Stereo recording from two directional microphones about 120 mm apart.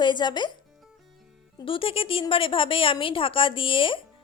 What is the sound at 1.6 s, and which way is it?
A woman's voice, 50° left (ahead or behind).